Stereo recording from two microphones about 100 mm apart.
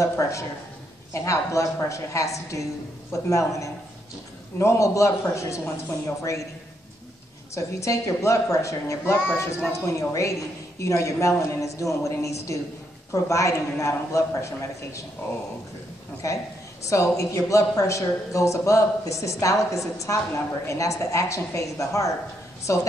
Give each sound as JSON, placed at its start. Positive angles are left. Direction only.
{"t": 0.0, "sound": "a woman's voice", "side_deg": 30}
{"t": 7.5, "sound": "a woman's voice", "side_deg": 30}
{"t": 16.2, "sound": "a woman's voice", "side_deg": 30}